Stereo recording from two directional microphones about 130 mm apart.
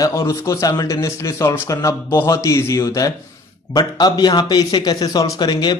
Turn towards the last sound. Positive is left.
turn(degrees=35)  # may be behind; listen again after turning